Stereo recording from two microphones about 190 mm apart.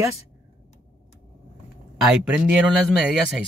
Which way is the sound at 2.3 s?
5° right (ahead or behind).